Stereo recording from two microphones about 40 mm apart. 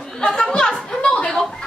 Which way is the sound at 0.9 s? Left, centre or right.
Left.